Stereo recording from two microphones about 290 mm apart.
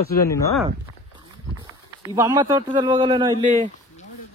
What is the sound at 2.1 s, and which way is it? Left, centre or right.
A man's voice, centre.